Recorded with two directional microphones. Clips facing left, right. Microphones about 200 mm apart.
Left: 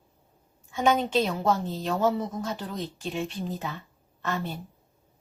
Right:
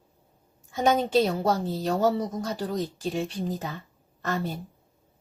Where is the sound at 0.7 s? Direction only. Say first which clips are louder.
Right 1 dB; 40° right (ahead or behind).